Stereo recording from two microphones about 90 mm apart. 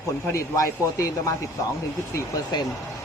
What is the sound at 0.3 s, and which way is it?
Speech, 35° left (ahead or behind).